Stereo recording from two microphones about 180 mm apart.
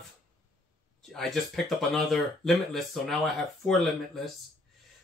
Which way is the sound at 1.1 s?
Centre (ahead or behind).